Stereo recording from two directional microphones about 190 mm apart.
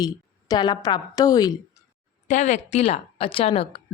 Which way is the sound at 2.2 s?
40° left (ahead or behind).